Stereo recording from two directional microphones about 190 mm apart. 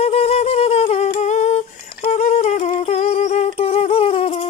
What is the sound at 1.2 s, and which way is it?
Humming, 35° left (ahead or behind).